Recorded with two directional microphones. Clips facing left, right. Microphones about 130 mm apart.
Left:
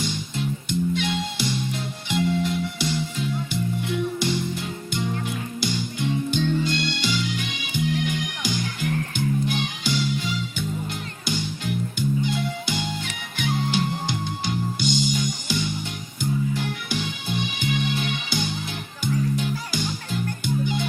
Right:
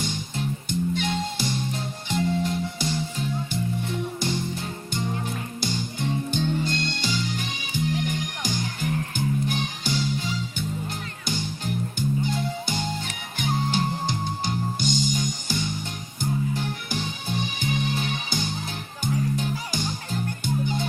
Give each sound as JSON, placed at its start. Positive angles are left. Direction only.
{"t": 0.0, "sound": "music", "side_deg": -45}
{"t": 5.5, "sound": "music", "side_deg": -40}